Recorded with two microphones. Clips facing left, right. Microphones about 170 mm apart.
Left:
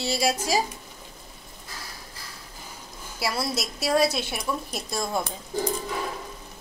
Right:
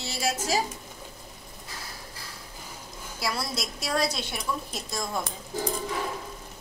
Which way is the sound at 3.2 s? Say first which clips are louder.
Left 3 dB; 10° left (ahead or behind).